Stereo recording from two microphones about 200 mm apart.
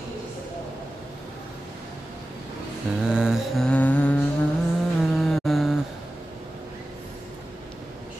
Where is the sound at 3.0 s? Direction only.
5° right (ahead or behind).